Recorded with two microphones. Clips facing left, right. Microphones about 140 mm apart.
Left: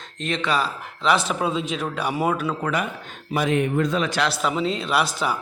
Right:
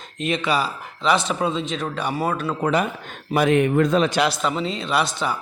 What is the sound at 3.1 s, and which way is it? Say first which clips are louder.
Speech: right 4 dB; 65° right (ahead or behind).